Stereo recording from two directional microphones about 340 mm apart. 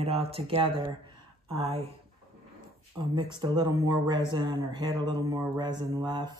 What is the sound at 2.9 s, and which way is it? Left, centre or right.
Speech, centre.